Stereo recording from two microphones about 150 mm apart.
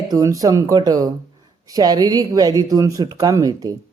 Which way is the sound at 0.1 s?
20° right (ahead or behind).